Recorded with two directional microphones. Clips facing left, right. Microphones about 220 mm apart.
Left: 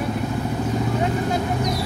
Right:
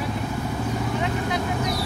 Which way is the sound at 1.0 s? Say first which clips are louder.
Left 3 dB; 40° left (ahead or behind).